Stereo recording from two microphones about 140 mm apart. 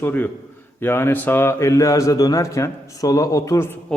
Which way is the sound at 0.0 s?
15° left (ahead or behind).